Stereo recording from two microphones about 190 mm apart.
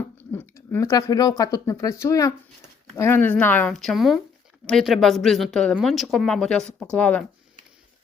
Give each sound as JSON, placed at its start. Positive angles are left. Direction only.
{"t": 0.0, "sound": "speech", "side_deg": 10}